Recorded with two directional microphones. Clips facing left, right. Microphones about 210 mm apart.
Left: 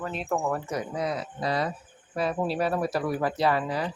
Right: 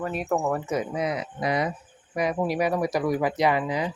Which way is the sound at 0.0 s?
10° right (ahead or behind).